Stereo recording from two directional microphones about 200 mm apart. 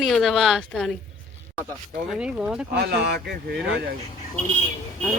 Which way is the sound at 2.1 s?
5° right (ahead or behind).